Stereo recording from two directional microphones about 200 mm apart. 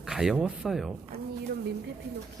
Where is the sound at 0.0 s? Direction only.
Centre (ahead or behind).